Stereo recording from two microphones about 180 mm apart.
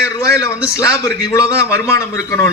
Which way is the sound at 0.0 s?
15° left (ahead or behind).